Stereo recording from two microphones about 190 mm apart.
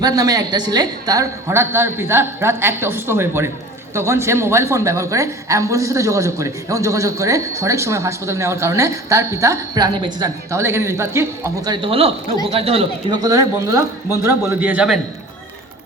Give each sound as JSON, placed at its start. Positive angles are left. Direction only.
{"t": 0.0, "sound": "a woman's voice", "side_deg": -20}
{"t": 13.2, "sound": "a woman's voice", "side_deg": -15}